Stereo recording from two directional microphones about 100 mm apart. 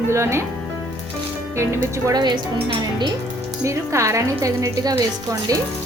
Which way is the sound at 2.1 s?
45° right (ahead or behind).